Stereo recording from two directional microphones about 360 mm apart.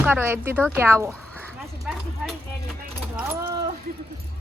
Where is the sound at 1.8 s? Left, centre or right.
Centre.